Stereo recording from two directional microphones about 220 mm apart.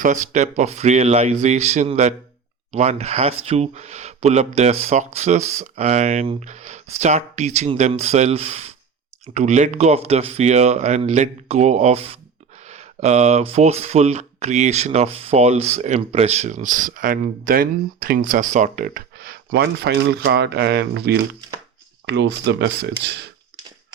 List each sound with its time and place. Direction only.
0.0 s speech: 35° right (ahead or behind)